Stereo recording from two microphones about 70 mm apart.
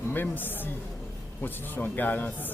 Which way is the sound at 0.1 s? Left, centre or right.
Left.